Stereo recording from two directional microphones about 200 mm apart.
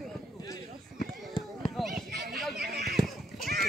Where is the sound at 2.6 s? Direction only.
50° right (ahead or behind).